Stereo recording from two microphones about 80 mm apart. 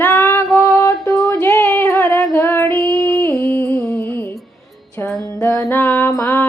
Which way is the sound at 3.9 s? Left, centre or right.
Left.